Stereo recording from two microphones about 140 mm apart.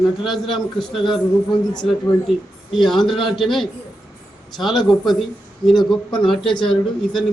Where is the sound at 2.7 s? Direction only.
Centre (ahead or behind).